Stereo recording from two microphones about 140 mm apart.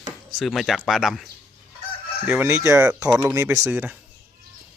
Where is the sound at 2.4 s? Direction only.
20° right (ahead or behind).